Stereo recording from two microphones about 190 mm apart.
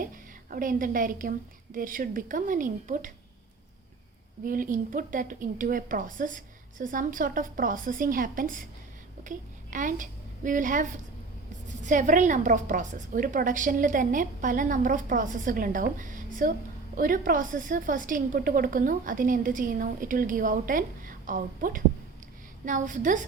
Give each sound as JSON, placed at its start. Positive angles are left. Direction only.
{"t": 0.5, "sound": "a woman's voice", "side_deg": -45}
{"t": 4.4, "sound": "a woman's voice", "side_deg": -45}